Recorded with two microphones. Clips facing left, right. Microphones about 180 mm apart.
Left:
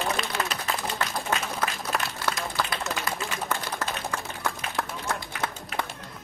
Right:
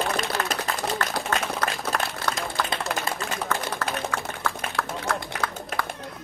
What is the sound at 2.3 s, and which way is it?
Run, 25° right (ahead or behind).